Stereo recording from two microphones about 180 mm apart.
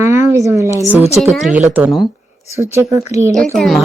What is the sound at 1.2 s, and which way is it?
A woman's voice, 5° right (ahead or behind).